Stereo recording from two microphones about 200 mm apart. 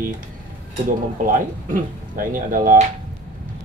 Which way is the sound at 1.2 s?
45° right (ahead or behind).